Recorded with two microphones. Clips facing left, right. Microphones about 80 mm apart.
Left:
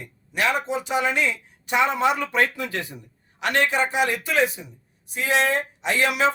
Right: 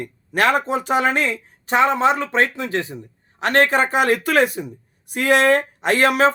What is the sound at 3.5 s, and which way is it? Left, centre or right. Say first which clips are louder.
A man's voice: right 5 dB; right.